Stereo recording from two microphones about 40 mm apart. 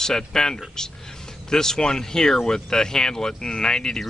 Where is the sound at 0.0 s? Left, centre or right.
Centre.